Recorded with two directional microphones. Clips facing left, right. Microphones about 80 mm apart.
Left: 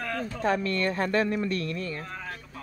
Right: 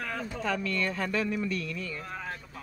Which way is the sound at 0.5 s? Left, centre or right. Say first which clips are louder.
Left 4 dB; left.